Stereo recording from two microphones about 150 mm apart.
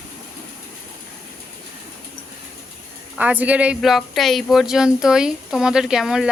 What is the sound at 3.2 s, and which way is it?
Speech, 10° right (ahead or behind).